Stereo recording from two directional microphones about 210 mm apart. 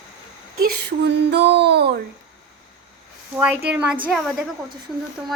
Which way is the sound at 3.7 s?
5° right (ahead or behind).